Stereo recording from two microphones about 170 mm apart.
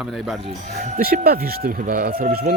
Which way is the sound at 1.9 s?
50° right (ahead or behind).